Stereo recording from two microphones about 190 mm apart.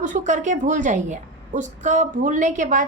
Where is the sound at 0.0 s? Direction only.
40° right (ahead or behind).